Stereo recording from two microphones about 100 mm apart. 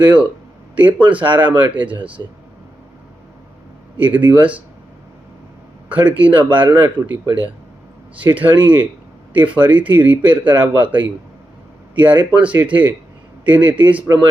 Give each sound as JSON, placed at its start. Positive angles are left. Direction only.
{"t": 0.0, "sound": "speech", "side_deg": -15}
{"t": 2.2, "sound": "speech", "side_deg": -40}
{"t": 3.9, "sound": "speech", "side_deg": -20}
{"t": 5.9, "sound": "speech", "side_deg": -15}
{"t": 8.4, "sound": "speech", "side_deg": -20}